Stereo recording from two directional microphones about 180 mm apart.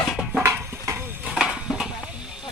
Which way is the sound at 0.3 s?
15° right (ahead or behind).